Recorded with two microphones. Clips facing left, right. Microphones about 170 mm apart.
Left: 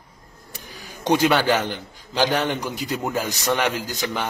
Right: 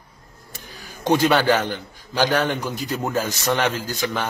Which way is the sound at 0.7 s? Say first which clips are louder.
Right 1 dB; 15° left (ahead or behind).